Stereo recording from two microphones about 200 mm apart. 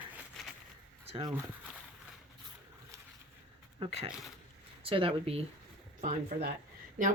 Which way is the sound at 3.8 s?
25° right (ahead or behind).